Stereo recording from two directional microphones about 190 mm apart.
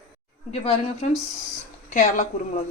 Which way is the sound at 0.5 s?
35° left (ahead or behind).